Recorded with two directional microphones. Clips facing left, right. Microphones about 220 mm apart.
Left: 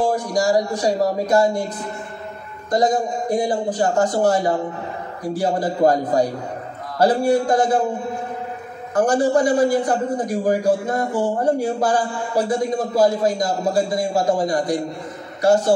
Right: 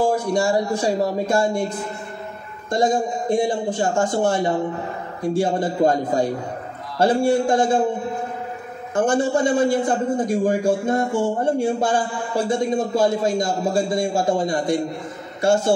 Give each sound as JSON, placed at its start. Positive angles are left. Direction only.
{"t": 0.1, "sound": "a man's voice", "side_deg": -25}
{"t": 2.7, "sound": "a man's voice", "side_deg": -25}
{"t": 8.9, "sound": "a man's voice", "side_deg": -25}